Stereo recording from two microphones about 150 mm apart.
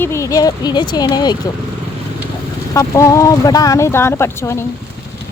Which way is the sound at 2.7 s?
20° left (ahead or behind).